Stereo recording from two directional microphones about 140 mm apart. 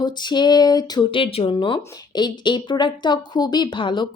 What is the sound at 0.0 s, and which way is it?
A woman's voice, 30° left (ahead or behind).